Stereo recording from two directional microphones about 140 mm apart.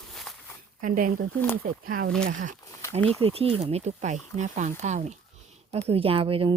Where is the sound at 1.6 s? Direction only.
90° right.